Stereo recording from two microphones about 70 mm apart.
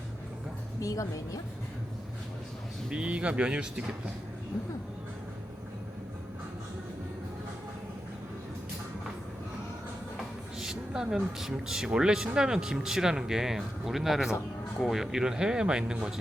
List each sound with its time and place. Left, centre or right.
0.8 s a woman's voice: left
2.9 s speech: centre
10.6 s speech: centre